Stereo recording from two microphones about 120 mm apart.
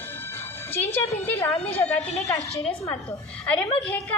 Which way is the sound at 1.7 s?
15° left (ahead or behind).